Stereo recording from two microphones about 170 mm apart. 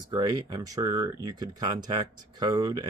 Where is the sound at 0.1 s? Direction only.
25° right (ahead or behind).